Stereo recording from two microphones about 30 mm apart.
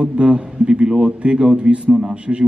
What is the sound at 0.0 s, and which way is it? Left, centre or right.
A man's voice, right.